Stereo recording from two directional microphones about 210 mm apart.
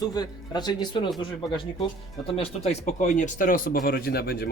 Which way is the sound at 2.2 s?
30° left (ahead or behind).